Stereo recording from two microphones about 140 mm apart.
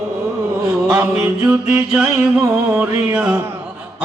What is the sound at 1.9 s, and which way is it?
Mantra, 5° right (ahead or behind).